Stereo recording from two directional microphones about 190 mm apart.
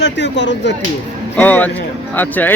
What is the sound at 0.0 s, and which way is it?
Speech, 70° left (ahead or behind).